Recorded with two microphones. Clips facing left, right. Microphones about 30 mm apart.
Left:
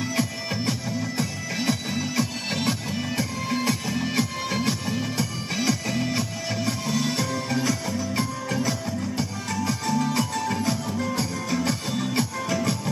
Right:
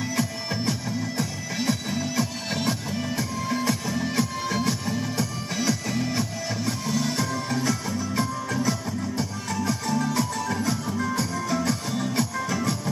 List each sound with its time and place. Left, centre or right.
0.2 s music: centre
8.4 s music: left
9.5 s music: centre
10.0 s music: left
10.7 s music: centre
11.1 s music: centre